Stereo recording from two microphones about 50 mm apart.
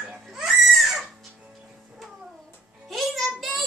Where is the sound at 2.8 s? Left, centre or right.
Centre.